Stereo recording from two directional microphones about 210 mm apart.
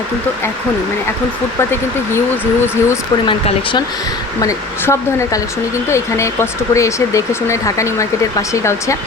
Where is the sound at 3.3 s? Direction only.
25° left (ahead or behind).